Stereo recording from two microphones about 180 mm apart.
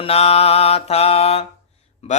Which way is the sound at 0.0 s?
35° left (ahead or behind).